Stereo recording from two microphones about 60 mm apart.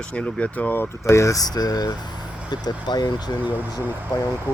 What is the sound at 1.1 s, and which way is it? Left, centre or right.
Speech, left.